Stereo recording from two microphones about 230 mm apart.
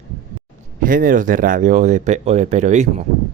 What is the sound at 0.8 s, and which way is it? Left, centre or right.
Speech, right.